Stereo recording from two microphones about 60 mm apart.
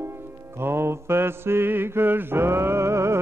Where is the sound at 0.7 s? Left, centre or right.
Right.